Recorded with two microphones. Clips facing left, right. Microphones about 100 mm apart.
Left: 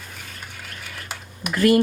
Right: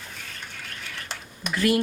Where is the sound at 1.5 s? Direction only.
45° left (ahead or behind).